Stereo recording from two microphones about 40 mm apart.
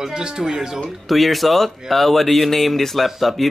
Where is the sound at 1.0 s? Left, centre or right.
Centre.